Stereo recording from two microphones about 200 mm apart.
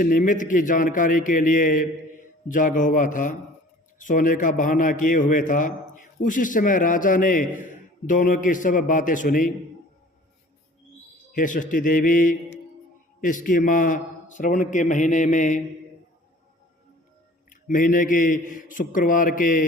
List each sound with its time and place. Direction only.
0.0 s a man's voice: 40° left (ahead or behind)
11.3 s a man's voice: 40° left (ahead or behind)
17.5 s a man's voice: 40° left (ahead or behind)